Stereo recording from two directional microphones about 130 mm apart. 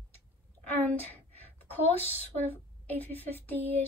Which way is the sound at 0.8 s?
15° left (ahead or behind).